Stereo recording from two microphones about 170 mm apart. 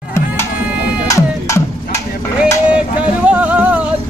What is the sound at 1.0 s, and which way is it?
Music, 20° left (ahead or behind).